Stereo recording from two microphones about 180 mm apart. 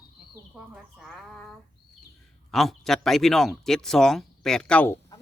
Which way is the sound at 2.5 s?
Centre (ahead or behind).